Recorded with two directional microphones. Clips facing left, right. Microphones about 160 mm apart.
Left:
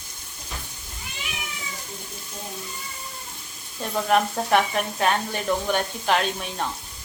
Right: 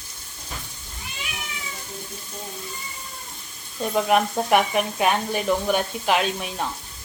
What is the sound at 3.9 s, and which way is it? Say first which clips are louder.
Speech: right 1 dB; 10° right (ahead or behind).